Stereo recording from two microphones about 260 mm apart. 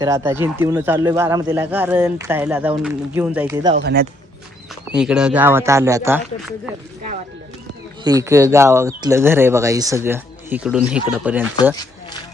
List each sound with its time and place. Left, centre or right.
0.0 s speech: centre
3.8 s speech: right
4.9 s speech: centre
8.0 s speech: centre